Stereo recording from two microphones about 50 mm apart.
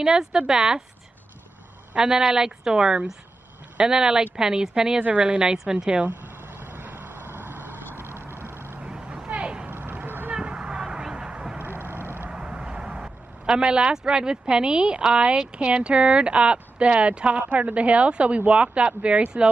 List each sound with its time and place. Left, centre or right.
0.0 s speech: centre
2.0 s speech: centre
5.0 s speech: right
6.6 s vehicle: right
8.8 s vehicle: centre
9.7 s vehicle: right
10.4 s vehicle: right
11.6 s vehicle: right
12.3 s speech: centre